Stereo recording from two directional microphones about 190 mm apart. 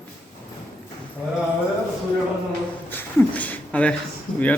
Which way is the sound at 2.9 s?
10° left (ahead or behind).